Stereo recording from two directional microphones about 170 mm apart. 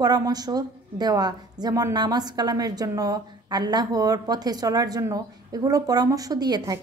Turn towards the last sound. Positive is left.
turn(degrees=-20)  # may be behind; listen again after turning